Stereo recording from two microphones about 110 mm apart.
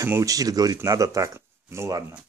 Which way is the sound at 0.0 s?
30° right (ahead or behind).